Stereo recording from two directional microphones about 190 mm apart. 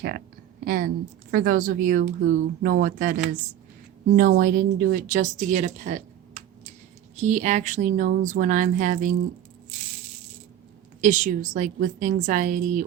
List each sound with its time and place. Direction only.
0.6 s speech: 50° right (ahead or behind)
5.2 s speech: 40° right (ahead or behind)
7.2 s speech: 40° right (ahead or behind)
11.0 s speech: 45° right (ahead or behind)